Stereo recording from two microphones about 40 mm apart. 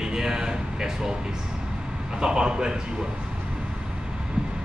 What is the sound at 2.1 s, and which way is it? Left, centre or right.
Speech, right.